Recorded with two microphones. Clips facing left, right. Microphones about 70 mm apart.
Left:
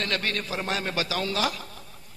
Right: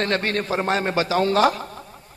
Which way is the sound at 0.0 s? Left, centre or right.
Right.